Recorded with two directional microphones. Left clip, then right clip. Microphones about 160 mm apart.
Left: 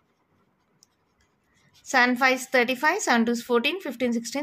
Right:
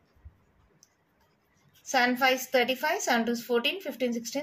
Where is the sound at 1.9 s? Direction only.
50° left (ahead or behind).